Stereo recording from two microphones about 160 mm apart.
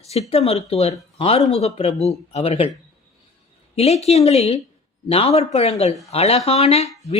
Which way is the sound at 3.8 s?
40° left (ahead or behind).